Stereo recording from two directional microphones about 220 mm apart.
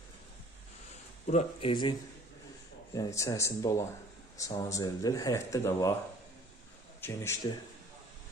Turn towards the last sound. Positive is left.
turn(degrees=10)  # may be behind; listen again after turning